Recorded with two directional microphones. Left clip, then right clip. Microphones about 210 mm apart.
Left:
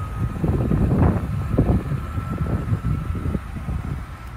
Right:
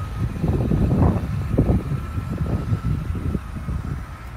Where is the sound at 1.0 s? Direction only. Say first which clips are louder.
Even; 25° right (ahead or behind).